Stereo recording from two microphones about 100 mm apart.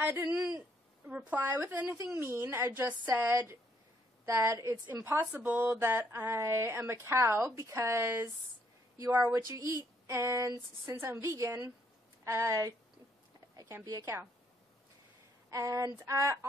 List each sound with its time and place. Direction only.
0.0 s speech: 25° right (ahead or behind)
1.0 s a woman's voice: 15° right (ahead or behind)
1.4 s speech: 30° right (ahead or behind)
5.3 s speech: 15° right (ahead or behind)
13.8 s speech: 30° right (ahead or behind)
15.5 s speech: 35° right (ahead or behind)